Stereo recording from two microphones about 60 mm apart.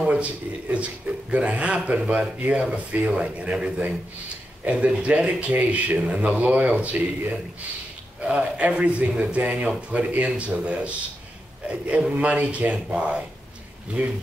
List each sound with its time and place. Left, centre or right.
0.0 s speech: centre